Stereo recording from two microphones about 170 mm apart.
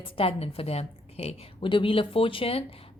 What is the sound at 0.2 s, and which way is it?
A woman's voice, 35° left (ahead or behind).